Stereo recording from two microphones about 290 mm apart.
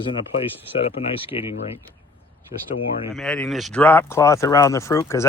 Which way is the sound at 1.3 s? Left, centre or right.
Left.